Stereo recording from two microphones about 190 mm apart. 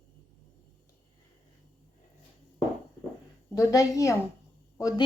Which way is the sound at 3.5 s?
20° left (ahead or behind).